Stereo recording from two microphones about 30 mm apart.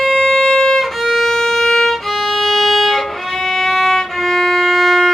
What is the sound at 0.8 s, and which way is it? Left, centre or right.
Violin, centre.